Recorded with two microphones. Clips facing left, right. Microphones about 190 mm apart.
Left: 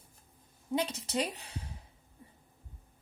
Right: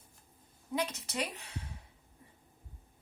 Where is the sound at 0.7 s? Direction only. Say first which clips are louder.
Left 3 dB; 30° left (ahead or behind).